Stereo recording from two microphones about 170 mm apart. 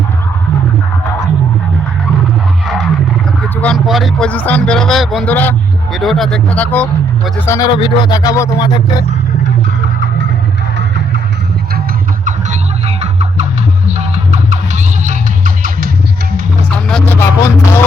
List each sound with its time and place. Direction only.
3.6 s a man's voice: centre (ahead or behind)
7.7 s speech: 25° left (ahead or behind)
13.8 s music: 40° right (ahead or behind)
16.7 s vehicle: 10° left (ahead or behind)